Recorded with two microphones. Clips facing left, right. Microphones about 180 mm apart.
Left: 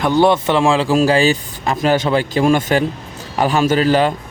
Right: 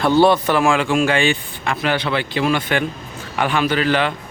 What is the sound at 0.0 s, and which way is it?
Speech, 15° left (ahead or behind).